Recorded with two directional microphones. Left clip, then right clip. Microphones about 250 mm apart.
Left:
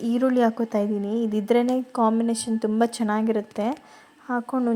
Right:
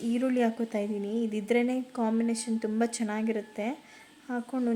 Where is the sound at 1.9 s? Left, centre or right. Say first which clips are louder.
Left 8 dB; centre.